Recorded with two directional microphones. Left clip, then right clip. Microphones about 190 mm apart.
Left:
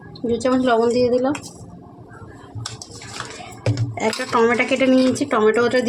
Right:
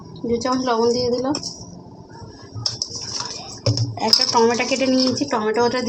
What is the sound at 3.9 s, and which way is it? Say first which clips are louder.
Speech: right 3 dB; 65° left (ahead or behind).